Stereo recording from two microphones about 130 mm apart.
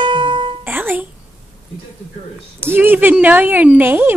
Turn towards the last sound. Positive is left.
turn(degrees=-15)  # may be behind; listen again after turning